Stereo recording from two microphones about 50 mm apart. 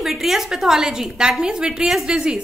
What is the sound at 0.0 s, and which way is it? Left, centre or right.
A woman's voice, centre.